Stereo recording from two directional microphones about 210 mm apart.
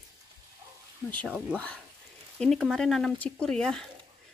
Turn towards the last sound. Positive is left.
turn(degrees=5)  # may be behind; listen again after turning